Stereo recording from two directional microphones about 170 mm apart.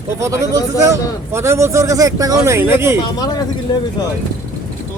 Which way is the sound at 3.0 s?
25° left (ahead or behind).